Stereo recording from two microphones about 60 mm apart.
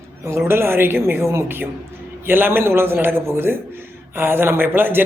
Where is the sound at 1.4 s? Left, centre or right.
Right.